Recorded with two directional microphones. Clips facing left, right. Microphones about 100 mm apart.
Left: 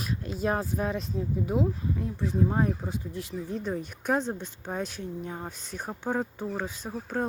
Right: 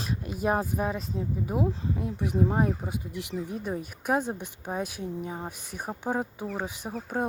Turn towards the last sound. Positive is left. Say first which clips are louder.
# even
turn(degrees=-15)  # may be behind; listen again after turning